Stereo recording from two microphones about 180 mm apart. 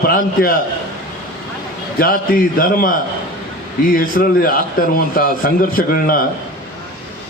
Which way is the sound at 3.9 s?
55° left (ahead or behind).